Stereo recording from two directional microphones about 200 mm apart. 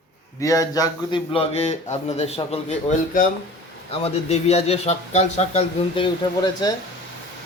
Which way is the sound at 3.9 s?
30° left (ahead or behind).